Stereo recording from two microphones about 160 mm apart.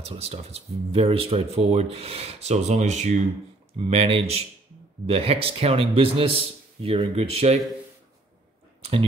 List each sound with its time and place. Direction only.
0.0 s speech: 40° right (ahead or behind)